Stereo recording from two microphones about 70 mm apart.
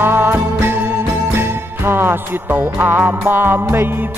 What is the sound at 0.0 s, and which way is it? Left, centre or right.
Music, right.